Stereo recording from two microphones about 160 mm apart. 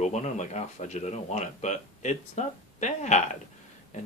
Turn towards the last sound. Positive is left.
turn(degrees=45)  # may be behind; listen again after turning